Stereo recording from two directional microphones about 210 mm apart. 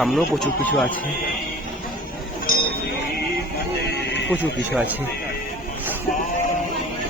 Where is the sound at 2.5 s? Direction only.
45° left (ahead or behind).